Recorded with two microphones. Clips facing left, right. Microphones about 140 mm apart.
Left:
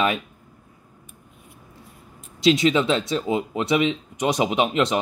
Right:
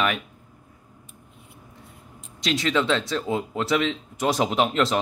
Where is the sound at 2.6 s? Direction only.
25° left (ahead or behind).